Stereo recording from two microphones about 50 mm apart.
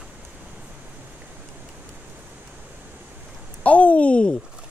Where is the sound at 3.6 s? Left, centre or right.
Left.